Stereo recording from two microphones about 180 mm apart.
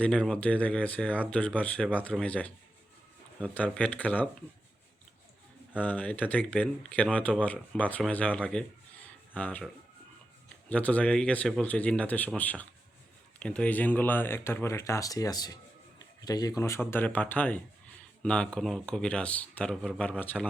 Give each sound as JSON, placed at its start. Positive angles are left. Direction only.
{"t": 0.0, "sound": "speech", "side_deg": 5}
{"t": 5.7, "sound": "speech", "side_deg": 10}
{"t": 9.0, "sound": "a sound", "side_deg": 10}
{"t": 10.7, "sound": "speech", "side_deg": 10}